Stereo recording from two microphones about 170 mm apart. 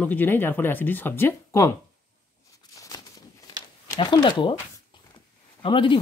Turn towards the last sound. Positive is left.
turn(degrees=30)  # may be behind; listen again after turning